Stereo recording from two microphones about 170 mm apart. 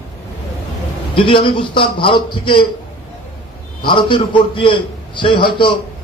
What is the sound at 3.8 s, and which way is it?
A man's voice, 30° left (ahead or behind).